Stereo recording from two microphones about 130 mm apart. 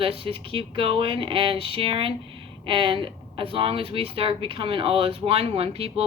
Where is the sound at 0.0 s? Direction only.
45° right (ahead or behind).